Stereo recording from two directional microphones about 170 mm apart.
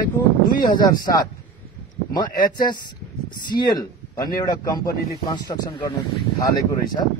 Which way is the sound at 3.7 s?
25° left (ahead or behind).